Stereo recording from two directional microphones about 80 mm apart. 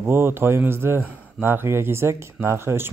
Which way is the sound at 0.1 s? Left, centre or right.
Right.